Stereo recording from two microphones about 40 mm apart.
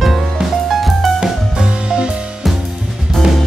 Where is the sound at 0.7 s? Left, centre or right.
Centre.